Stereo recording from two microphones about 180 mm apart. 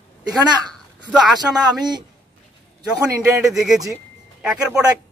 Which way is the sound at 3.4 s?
Centre (ahead or behind).